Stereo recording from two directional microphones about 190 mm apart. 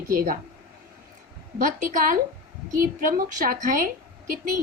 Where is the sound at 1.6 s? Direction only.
45° right (ahead or behind).